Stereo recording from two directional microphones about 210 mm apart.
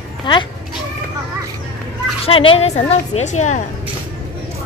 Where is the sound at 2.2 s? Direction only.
25° left (ahead or behind).